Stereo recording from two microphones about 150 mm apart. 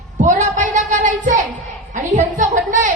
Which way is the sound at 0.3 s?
55° right (ahead or behind).